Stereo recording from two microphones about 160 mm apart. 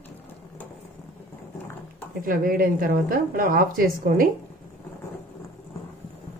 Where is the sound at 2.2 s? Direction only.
60° right (ahead or behind).